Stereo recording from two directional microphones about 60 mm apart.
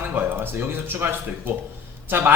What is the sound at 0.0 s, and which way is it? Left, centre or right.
Speech, right.